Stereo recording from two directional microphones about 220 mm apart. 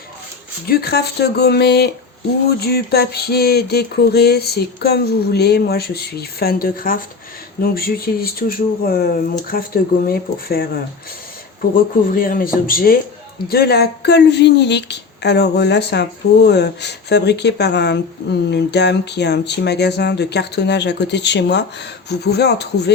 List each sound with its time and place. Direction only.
0.7 s speech: 45° left (ahead or behind)
11.7 s speech: 40° left (ahead or behind)